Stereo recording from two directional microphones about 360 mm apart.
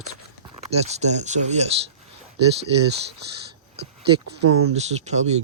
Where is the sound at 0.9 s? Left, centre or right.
Centre.